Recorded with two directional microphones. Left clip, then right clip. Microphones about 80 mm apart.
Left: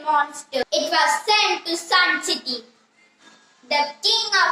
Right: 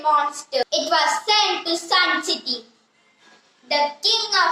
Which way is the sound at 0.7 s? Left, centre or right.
Right.